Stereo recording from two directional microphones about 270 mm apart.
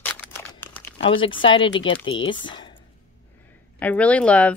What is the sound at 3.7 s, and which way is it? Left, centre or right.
Speech, centre.